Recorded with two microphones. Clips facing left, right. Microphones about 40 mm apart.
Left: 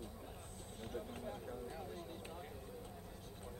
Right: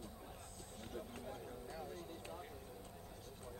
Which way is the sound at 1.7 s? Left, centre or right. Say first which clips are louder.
Left 1 dB; left.